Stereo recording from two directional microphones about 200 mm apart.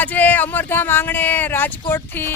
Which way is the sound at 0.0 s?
10° left (ahead or behind).